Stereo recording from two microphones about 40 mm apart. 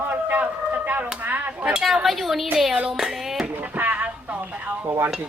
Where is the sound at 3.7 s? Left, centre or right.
Right.